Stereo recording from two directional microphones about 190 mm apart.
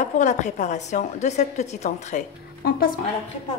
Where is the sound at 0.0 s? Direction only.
40° left (ahead or behind).